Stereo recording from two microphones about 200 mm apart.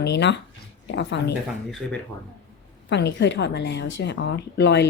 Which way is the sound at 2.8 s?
60° left (ahead or behind).